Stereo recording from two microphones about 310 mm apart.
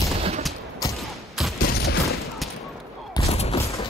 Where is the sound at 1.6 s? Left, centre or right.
Left.